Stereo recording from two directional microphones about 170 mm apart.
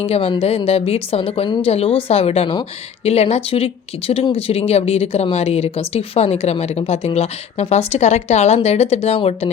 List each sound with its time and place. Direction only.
0.0 s a woman's voice: 35° left (ahead or behind)